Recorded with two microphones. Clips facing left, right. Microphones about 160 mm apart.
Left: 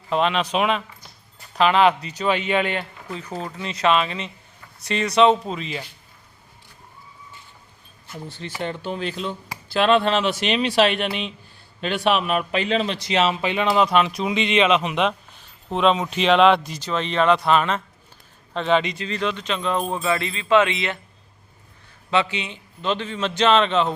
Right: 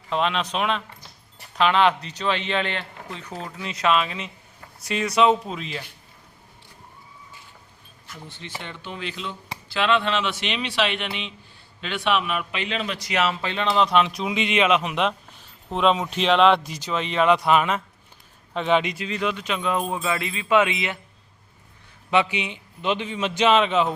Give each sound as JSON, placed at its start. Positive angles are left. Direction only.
{"t": 0.1, "sound": "a man's voice", "side_deg": 0}
{"t": 8.0, "sound": "a man's voice", "side_deg": 35}
{"t": 22.1, "sound": "speech", "side_deg": -15}